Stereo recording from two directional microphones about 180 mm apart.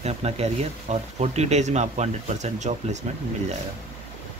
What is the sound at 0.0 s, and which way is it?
Speech, 35° right (ahead or behind).